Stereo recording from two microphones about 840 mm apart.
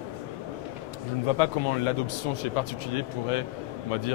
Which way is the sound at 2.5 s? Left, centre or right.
Left.